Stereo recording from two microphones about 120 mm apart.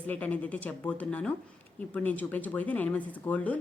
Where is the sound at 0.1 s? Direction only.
10° left (ahead or behind).